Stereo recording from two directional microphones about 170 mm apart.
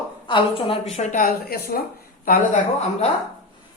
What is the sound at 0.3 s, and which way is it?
A woman's voice, 30° left (ahead or behind).